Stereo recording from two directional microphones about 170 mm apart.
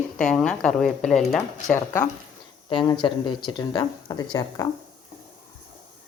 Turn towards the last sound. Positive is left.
turn(degrees=20)  # may be behind; listen again after turning